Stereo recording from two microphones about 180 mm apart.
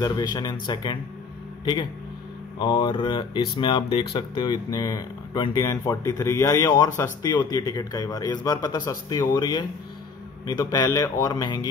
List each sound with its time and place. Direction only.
0.0 s speech: 20° left (ahead or behind)